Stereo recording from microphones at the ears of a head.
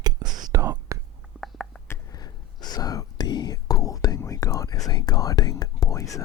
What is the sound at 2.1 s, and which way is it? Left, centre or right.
Whispering, left.